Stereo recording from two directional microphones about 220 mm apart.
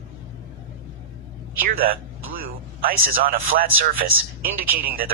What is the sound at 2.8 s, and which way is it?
Speech, 40° right (ahead or behind).